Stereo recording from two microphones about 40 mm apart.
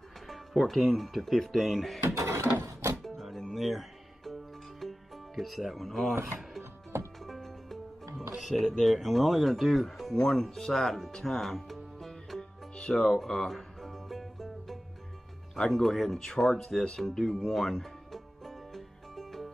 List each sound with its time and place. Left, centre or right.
0.3 s speech: centre
2.0 s a sound: right
3.0 s music: centre
7.2 s music: centre
8.5 s speech: centre
11.1 s music: centre
13.1 s music: centre
15.7 s speech: centre
17.2 s music: centre